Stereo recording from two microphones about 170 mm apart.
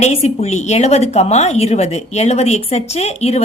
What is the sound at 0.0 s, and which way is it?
A woman's voice, 40° left (ahead or behind).